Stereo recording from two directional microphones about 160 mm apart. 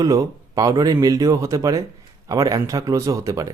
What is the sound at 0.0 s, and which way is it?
Speech, 20° right (ahead or behind).